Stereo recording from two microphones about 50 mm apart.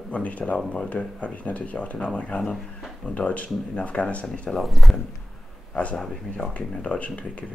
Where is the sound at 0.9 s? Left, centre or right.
Left.